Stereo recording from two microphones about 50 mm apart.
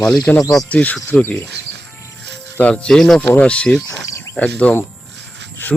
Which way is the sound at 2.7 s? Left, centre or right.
Centre.